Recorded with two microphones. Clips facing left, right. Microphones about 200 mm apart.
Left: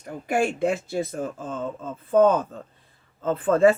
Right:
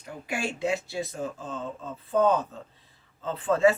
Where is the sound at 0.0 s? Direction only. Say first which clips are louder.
Left 8 dB; 50° left (ahead or behind).